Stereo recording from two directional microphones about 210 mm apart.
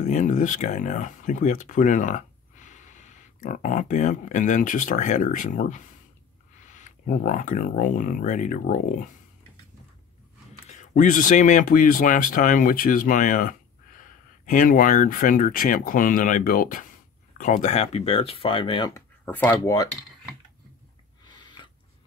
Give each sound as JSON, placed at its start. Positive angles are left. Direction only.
{"t": 0.0, "sound": "speech", "side_deg": 35}
{"t": 10.7, "sound": "speech", "side_deg": 35}
{"t": 21.3, "sound": "a sound", "side_deg": 20}